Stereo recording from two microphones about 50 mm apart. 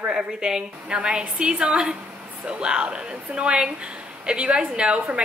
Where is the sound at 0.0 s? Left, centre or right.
Centre.